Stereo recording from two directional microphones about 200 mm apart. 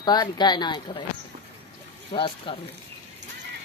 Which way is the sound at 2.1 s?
25° left (ahead or behind).